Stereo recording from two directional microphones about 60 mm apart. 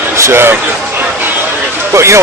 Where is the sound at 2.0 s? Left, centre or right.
Right.